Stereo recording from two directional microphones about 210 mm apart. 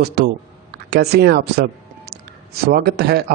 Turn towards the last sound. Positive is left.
turn(degrees=-50)  # may be behind; listen again after turning